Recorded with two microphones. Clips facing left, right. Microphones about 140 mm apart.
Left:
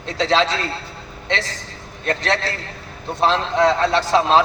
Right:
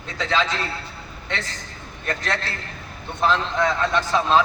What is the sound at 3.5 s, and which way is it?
Speech, 75° left (ahead or behind).